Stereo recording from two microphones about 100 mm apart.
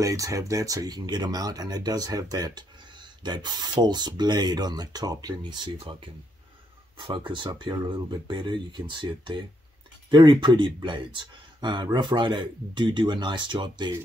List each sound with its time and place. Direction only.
0.0 s speech: 35° right (ahead or behind); by 13.9 s 50° right (ahead or behind)